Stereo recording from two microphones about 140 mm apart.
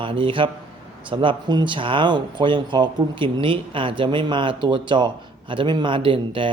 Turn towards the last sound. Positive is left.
turn(degrees=-40)  # may be behind; listen again after turning